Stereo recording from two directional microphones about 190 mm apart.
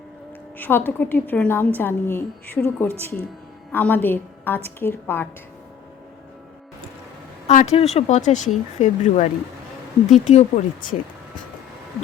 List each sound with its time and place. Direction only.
0.6 s a woman's voice: 10° left (ahead or behind)
7.4 s speech: 35° left (ahead or behind)